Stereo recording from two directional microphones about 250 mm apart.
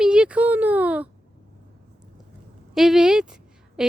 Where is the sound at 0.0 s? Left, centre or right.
Centre.